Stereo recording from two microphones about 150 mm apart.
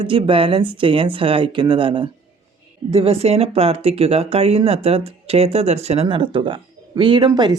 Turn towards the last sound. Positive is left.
turn(degrees=-30)  # may be behind; listen again after turning